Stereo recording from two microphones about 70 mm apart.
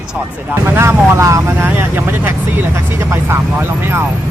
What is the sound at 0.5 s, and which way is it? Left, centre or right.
Speech, right.